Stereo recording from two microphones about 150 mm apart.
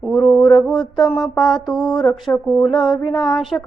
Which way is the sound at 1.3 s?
Centre (ahead or behind).